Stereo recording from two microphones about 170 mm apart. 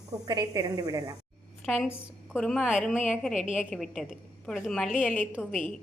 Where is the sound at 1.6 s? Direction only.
Centre (ahead or behind).